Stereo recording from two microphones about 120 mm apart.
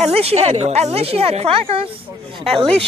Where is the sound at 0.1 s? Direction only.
55° right (ahead or behind).